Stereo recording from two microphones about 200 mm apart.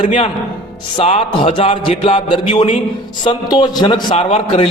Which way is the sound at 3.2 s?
20° left (ahead or behind).